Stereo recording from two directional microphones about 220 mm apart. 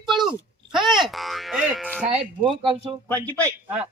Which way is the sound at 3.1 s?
5° left (ahead or behind).